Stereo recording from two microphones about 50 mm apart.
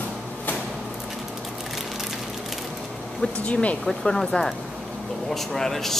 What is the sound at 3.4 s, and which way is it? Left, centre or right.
Speech, left.